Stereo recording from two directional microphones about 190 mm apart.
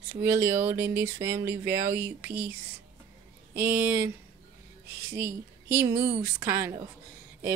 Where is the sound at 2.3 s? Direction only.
55° right (ahead or behind).